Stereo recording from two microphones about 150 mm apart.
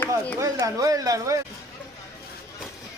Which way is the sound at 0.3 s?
20° right (ahead or behind).